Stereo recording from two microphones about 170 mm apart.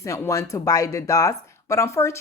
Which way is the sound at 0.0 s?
20° left (ahead or behind).